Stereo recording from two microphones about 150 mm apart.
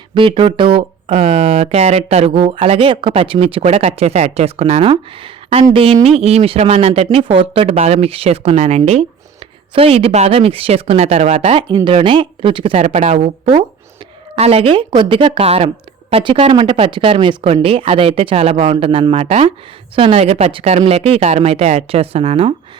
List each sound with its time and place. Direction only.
0.1 s speech: 35° right (ahead or behind)
12.8 s speech: 45° right (ahead or behind)
14.3 s speech: 40° right (ahead or behind)